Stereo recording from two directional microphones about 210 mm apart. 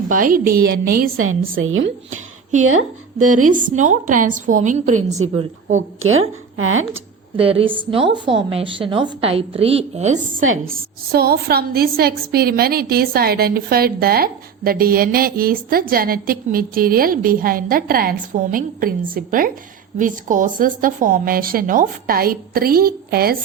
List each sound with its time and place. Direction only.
0.1 s a woman's voice: 40° right (ahead or behind)
1.1 s a woman's voice: 80° right
3.2 s a woman's voice: 35° right (ahead or behind)
6.0 s a woman's voice: 75° right (ahead or behind)
7.3 s a woman's voice: 25° right (ahead or behind)
10.7 s a woman's voice: 45° right (ahead or behind)